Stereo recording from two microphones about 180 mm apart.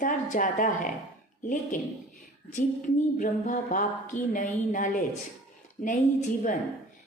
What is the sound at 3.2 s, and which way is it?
Speech, 45° left (ahead or behind).